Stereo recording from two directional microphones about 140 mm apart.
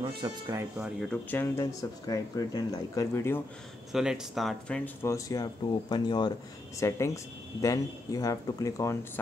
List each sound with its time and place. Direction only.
0.2 s speech: 35° right (ahead or behind)
1.1 s speech: 15° left (ahead or behind)
3.9 s speech: 5° right (ahead or behind)
5.0 s speech: 25° left (ahead or behind)